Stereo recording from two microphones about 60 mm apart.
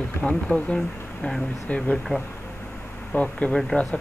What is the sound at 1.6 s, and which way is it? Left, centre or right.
Speech, left.